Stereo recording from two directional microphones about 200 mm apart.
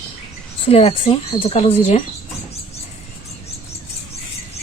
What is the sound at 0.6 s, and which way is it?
A woman's voice, 30° left (ahead or behind).